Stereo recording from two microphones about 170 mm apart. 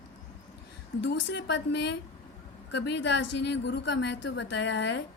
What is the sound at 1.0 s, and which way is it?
A woman's voice, 90° left.